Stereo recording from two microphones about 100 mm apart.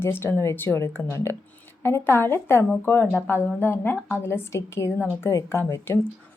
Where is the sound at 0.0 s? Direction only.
25° left (ahead or behind).